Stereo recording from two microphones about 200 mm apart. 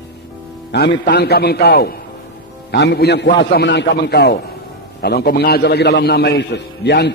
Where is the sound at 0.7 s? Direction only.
60° left (ahead or behind).